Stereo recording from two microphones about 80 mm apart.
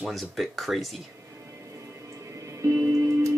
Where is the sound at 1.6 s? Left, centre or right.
Right.